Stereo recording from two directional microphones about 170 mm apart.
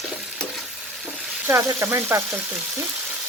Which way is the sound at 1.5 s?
15° right (ahead or behind).